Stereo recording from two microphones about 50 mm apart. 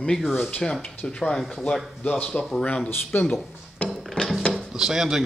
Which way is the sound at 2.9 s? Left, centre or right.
Left.